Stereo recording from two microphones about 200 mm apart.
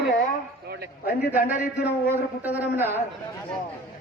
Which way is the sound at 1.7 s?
55° left (ahead or behind).